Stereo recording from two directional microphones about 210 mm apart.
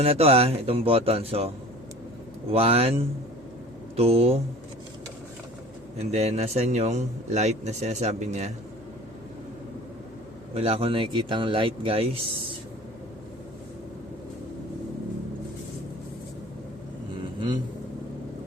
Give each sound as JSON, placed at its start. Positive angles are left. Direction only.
{"t": 0.0, "sound": "speech", "side_deg": -30}
{"t": 6.0, "sound": "a man's voice", "side_deg": -30}
{"t": 10.5, "sound": "speech", "side_deg": -30}